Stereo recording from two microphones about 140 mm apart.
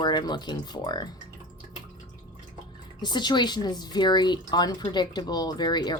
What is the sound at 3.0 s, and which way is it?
Speech, 30° left (ahead or behind).